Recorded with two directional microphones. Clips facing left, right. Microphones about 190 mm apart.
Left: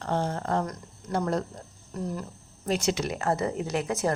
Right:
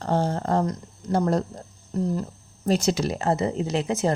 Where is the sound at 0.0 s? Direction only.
35° right (ahead or behind).